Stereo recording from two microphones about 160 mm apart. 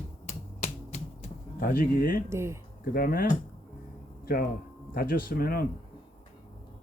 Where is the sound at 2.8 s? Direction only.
65° left (ahead or behind).